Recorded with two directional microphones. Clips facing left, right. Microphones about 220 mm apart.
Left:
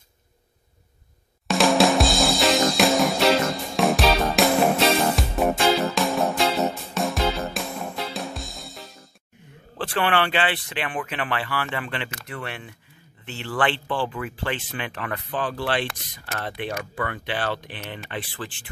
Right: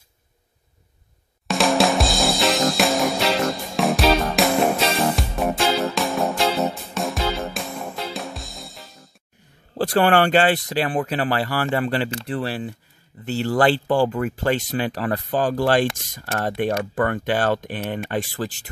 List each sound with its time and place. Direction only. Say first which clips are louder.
1.5 s music: even; centre (ahead or behind)
9.8 s speech: right 6 dB; 40° right (ahead or behind)